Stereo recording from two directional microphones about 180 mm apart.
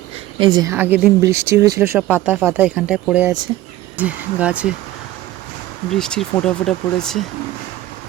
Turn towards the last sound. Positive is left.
turn(degrees=5)  # may be behind; listen again after turning